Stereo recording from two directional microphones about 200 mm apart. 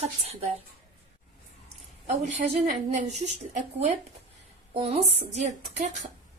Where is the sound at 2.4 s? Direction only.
40° right (ahead or behind).